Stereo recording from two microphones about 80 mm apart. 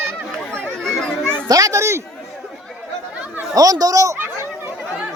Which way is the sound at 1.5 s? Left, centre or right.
Right.